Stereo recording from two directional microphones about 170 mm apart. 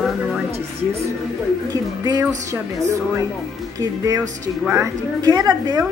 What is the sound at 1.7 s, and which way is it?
Speech, 25° right (ahead or behind).